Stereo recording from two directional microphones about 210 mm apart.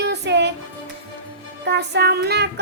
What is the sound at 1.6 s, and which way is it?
Speech, 55° right (ahead or behind).